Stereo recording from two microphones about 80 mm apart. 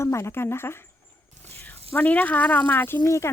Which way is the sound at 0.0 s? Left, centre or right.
Left.